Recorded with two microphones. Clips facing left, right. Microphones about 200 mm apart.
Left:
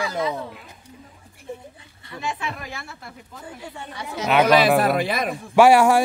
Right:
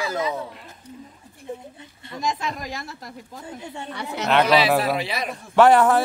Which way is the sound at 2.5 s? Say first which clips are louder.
Right 3 dB; 40° right (ahead or behind).